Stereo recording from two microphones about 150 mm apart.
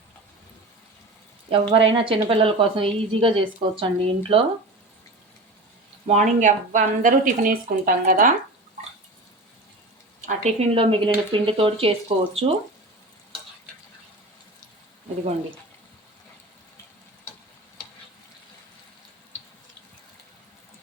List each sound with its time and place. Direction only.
1.5 s a woman's voice: 40° right (ahead or behind)
6.1 s speech: 55° right (ahead or behind)
10.2 s a woman's voice: 50° right (ahead or behind)